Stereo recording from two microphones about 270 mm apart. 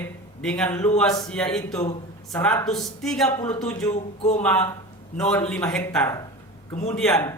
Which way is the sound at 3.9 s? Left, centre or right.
Left.